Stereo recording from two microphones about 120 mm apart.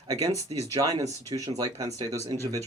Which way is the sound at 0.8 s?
30° right (ahead or behind).